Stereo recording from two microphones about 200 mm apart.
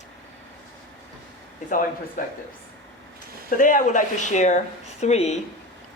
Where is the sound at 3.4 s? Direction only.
40° left (ahead or behind).